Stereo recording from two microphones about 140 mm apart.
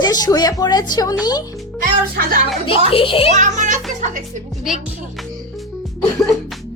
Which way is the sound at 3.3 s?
60° right (ahead or behind).